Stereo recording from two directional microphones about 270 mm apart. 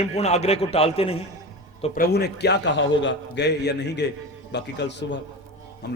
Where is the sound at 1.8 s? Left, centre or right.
Left.